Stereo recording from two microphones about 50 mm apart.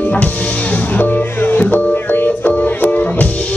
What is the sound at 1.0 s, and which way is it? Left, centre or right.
Music, left.